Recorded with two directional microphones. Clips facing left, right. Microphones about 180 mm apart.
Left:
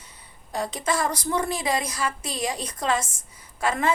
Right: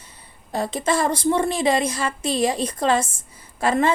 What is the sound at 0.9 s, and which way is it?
A woman's voice, 30° right (ahead or behind).